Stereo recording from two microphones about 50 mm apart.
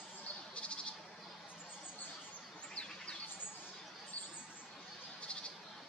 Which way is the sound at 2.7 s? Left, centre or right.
Centre.